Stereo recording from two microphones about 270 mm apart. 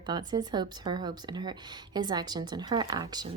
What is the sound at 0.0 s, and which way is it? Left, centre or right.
Speech, centre.